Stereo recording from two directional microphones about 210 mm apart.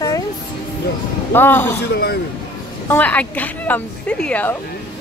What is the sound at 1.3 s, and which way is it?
Speech, 10° left (ahead or behind).